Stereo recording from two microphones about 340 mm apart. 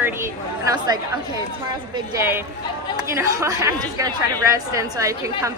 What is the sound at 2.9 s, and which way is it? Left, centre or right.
A woman's voice, centre.